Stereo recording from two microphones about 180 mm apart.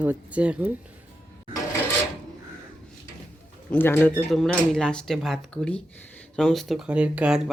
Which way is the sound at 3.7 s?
10° left (ahead or behind).